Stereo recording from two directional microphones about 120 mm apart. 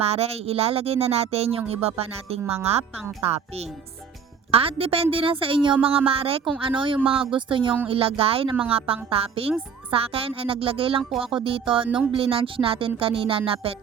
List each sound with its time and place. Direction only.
0.0 s speech: 60° right (ahead or behind)
4.5 s speech: 50° right (ahead or behind)